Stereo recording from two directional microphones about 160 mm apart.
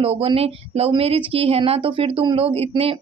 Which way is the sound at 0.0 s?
35° right (ahead or behind).